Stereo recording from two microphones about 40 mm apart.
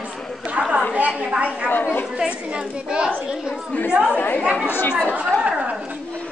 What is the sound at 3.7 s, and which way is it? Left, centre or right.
Speech, left.